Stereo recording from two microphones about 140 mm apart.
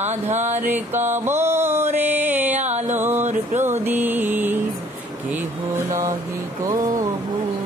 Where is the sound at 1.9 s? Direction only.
15° right (ahead or behind).